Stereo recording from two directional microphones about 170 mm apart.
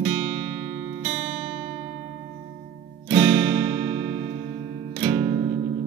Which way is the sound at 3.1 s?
10° right (ahead or behind).